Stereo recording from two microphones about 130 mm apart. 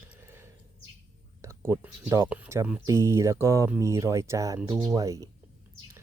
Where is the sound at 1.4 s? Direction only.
20° right (ahead or behind).